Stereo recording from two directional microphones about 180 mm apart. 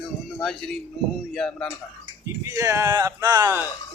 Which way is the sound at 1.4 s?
5° left (ahead or behind).